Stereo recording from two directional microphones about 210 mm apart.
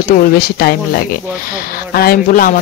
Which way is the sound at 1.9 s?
45° left (ahead or behind).